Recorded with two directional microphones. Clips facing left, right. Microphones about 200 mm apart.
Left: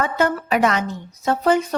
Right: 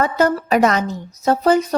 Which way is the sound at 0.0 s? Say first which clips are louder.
Right 3 dB; 40° right (ahead or behind).